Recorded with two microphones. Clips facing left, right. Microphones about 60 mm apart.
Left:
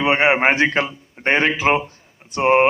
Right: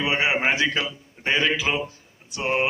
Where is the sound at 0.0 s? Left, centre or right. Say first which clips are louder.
Left 7 dB; left.